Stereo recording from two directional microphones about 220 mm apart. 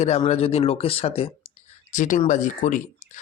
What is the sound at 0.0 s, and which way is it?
Speech, 30° left (ahead or behind).